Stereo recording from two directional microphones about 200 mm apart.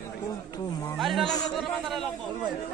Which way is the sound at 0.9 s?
Centre (ahead or behind).